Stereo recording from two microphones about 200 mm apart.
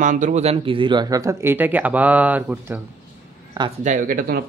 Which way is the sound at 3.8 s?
40° right (ahead or behind).